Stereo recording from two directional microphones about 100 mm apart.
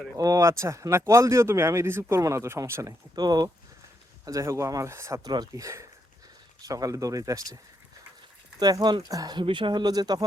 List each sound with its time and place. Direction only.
0.2 s a man's voice: 35° right (ahead or behind)
3.2 s speech: 45° right (ahead or behind)
4.3 s speech: 30° right (ahead or behind)
5.3 s speech: 45° right (ahead or behind)